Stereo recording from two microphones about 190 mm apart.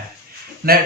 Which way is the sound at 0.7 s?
55° right (ahead or behind).